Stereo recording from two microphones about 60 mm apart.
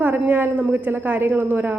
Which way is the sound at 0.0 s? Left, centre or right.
Right.